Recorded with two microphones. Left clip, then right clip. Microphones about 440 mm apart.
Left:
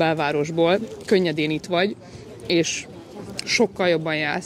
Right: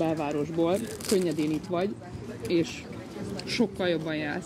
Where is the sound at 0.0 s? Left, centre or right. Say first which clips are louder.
Left 8 dB; left.